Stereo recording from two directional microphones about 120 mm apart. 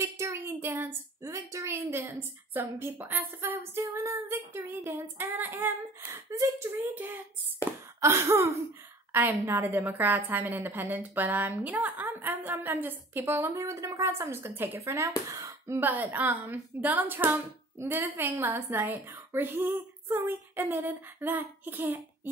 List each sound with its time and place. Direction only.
0.0 s a woman's voice: 25° right (ahead or behind)